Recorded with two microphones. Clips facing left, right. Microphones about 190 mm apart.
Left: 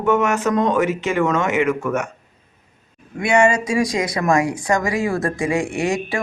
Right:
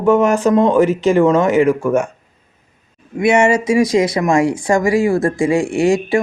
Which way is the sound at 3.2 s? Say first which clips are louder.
Right 3 dB; 25° right (ahead or behind).